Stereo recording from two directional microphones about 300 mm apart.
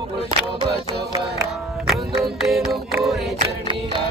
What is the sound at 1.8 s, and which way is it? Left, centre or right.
Music, centre.